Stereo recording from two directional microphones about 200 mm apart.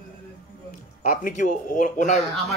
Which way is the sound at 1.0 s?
45° left (ahead or behind).